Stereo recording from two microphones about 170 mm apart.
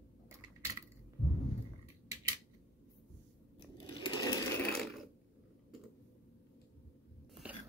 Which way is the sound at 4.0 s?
25° left (ahead or behind).